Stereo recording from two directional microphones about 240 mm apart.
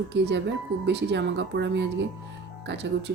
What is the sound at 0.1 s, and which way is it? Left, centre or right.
Speech, right.